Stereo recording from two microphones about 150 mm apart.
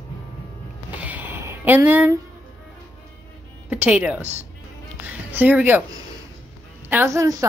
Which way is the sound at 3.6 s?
10° right (ahead or behind).